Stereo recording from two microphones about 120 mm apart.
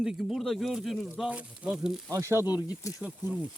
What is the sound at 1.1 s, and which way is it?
Speech, 10° right (ahead or behind).